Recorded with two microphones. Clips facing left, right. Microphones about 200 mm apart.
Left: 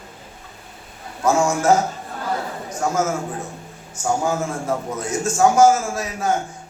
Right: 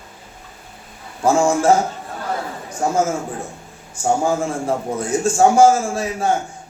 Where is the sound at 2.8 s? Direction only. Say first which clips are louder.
Right 3 dB; 30° right (ahead or behind).